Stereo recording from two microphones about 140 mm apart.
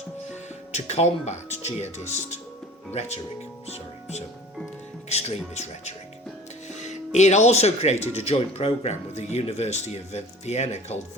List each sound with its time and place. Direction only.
0.7 s speech: 50° left (ahead or behind)
5.0 s speech: 50° left (ahead or behind)